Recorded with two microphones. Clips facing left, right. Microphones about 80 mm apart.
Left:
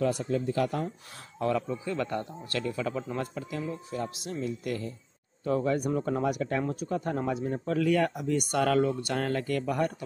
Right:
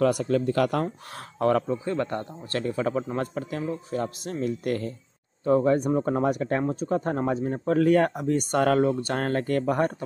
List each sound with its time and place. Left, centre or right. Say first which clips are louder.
0.0 s speech: right 5 dB; right
1.1 s speech: right 6 dB; right
1.7 s speech: right 4 dB; right
5.4 s speech: right 6 dB; right